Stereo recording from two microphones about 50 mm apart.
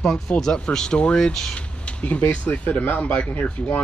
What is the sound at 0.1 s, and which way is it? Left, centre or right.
Speech, centre.